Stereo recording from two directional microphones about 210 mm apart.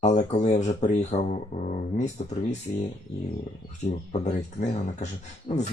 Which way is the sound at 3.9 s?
35° left (ahead or behind).